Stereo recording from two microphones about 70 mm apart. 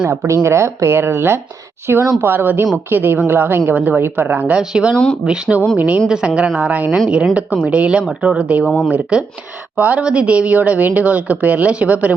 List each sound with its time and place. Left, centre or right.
0.1 s a woman's voice: right
4.5 s speech: centre
8.6 s speech: centre
8.9 s speech: centre